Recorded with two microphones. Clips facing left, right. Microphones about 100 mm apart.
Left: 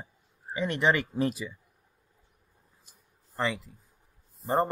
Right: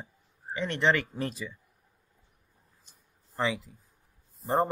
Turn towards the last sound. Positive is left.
turn(degrees=0)  # may be behind; listen again after turning